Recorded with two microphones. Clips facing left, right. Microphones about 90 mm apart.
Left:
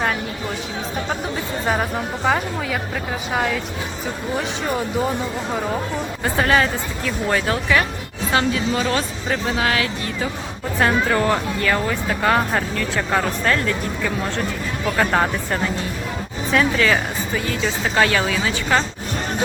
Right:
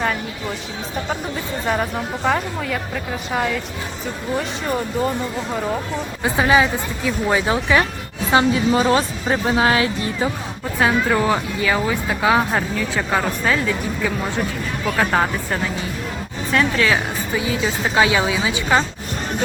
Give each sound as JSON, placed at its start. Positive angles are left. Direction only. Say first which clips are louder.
{"t": 1.6, "sound": "speech", "louder": "even", "side_deg": 5}
{"t": 6.2, "sound": "a woman's voice", "louder": "right 2 dB", "side_deg": -5}
{"t": 10.8, "sound": "speech", "louder": "right 1 dB", "side_deg": -5}